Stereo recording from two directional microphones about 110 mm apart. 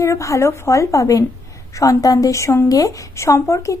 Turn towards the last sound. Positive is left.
turn(degrees=30)  # may be behind; listen again after turning